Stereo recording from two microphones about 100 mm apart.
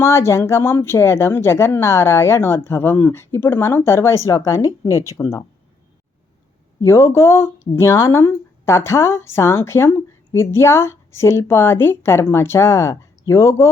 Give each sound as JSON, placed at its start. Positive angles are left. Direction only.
{"t": 0.0, "sound": "speech", "side_deg": 25}
{"t": 6.8, "sound": "speech", "side_deg": 25}